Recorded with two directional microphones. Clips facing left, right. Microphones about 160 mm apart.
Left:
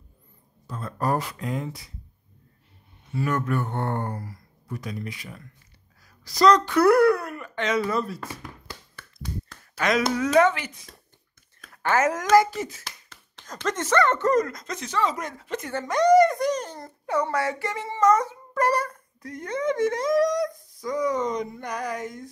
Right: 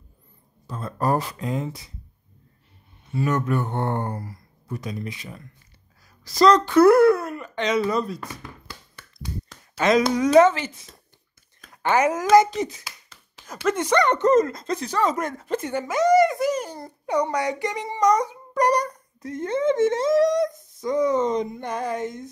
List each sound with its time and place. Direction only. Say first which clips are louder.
0.7 s speech: right 3 dB; 25° right (ahead or behind)
3.2 s speech: right 2 dB; 20° right (ahead or behind)
9.8 s speech: right 4 dB; 25° right (ahead or behind)
11.7 s speech: right 2 dB; 15° right (ahead or behind)
13.4 s speech: right 5 dB; 10° right (ahead or behind); by 15.6 s 45° right (ahead or behind)
15.7 s a child's voice: left 1 dB; 5° right (ahead or behind); by 22.3 s 25° right (ahead or behind)